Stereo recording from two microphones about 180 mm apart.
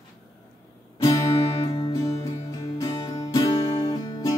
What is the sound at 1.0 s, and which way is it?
Music, 20° left (ahead or behind).